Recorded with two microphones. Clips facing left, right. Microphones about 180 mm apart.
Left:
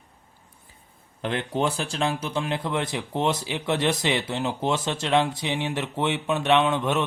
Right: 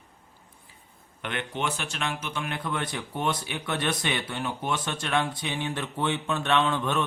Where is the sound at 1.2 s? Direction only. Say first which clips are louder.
Left 6 dB; 30° left (ahead or behind).